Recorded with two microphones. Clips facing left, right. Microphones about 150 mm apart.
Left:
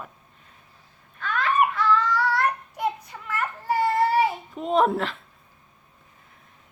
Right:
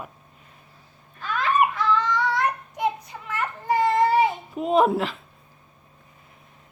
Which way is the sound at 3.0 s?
Centre (ahead or behind).